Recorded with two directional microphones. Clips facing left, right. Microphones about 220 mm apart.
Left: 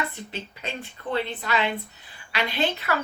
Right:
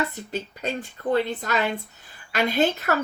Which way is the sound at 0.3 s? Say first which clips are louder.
Right 6 dB; 40° right (ahead or behind).